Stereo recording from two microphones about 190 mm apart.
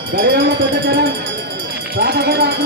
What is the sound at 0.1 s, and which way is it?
Speech, 60° right (ahead or behind).